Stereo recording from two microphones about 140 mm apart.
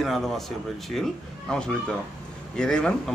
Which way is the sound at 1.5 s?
5° left (ahead or behind).